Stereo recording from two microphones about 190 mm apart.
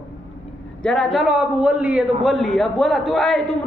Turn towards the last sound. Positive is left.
turn(degrees=0)  # may be behind; listen again after turning